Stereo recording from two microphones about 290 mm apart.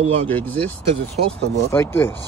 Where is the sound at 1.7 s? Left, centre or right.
Centre.